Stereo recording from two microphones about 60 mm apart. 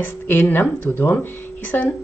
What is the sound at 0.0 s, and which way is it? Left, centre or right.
Speech, left.